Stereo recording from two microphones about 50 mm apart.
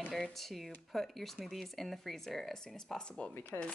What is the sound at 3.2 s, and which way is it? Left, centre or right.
Speech, left.